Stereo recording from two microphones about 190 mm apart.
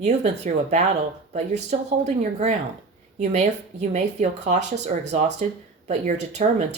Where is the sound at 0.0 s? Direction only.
35° right (ahead or behind).